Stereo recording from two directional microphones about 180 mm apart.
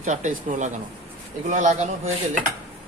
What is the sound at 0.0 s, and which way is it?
Speech, 45° right (ahead or behind).